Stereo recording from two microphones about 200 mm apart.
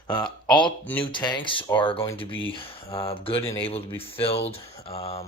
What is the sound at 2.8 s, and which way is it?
Speech, 15° left (ahead or behind).